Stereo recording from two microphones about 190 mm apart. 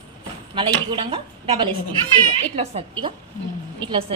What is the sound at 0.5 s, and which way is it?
A woman's voice, 25° right (ahead or behind).